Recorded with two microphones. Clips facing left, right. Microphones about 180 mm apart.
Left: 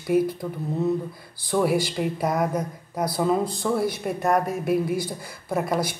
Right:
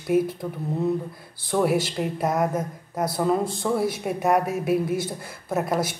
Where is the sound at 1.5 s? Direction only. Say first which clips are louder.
Even; centre (ahead or behind).